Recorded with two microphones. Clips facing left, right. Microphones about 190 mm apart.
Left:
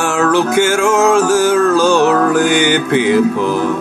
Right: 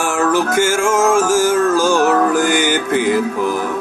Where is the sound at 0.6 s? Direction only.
70° left (ahead or behind).